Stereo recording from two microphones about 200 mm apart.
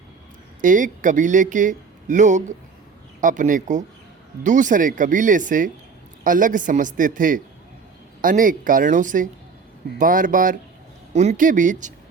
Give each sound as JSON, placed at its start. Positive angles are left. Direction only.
{"t": 0.6, "sound": "speech", "side_deg": -40}